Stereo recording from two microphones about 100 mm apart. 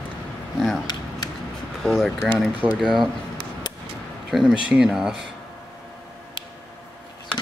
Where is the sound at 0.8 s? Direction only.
45° left (ahead or behind).